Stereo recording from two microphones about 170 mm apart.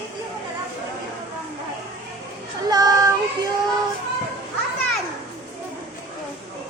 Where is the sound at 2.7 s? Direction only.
20° right (ahead or behind).